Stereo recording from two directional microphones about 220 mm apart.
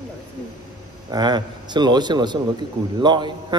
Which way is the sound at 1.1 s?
20° right (ahead or behind).